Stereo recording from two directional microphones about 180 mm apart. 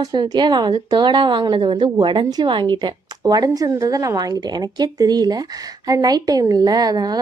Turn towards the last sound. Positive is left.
turn(degrees=-20)  # may be behind; listen again after turning